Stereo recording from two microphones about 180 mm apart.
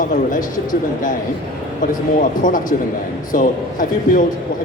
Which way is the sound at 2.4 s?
50° left (ahead or behind).